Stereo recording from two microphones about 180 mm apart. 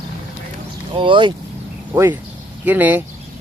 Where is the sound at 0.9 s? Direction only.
25° right (ahead or behind).